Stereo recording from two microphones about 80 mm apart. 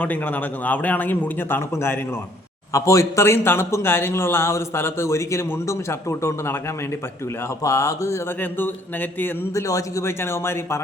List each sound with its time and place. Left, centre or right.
0.0 s speech: centre
2.7 s a man's voice: left
7.6 s a man's voice: left
8.4 s speech: left
9.6 s a man's voice: left